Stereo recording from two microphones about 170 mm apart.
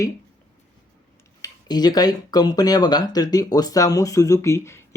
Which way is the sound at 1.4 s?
25° left (ahead or behind).